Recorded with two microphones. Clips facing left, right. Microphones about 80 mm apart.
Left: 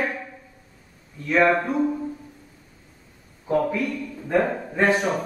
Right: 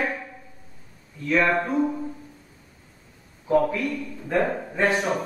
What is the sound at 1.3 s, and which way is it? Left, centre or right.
Speech, centre.